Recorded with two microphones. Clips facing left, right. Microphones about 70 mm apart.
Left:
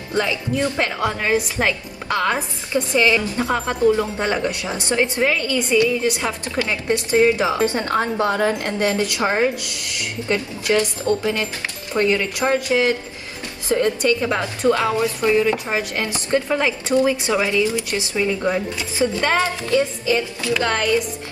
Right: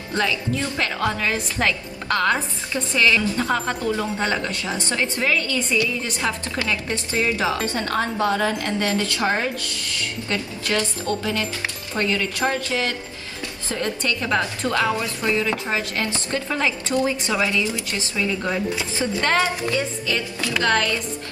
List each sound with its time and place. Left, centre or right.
0.1 s a woman's voice: left
20.6 s a woman's voice: left